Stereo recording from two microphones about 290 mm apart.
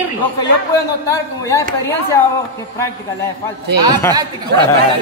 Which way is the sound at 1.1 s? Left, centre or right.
Centre.